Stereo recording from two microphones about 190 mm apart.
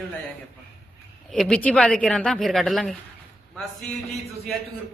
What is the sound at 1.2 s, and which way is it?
Speech, 5° left (ahead or behind).